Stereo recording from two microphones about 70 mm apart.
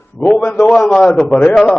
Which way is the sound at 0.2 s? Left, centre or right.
Centre.